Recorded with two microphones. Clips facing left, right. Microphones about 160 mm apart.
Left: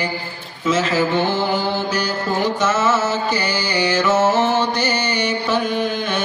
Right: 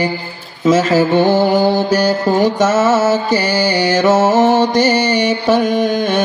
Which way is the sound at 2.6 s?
45° right (ahead or behind).